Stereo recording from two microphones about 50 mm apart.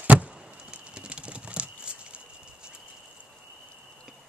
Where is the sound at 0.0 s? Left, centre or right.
Right.